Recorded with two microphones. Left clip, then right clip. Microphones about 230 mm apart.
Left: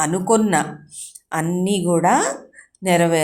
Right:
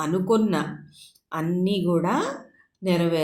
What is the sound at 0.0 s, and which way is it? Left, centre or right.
A woman's voice, left.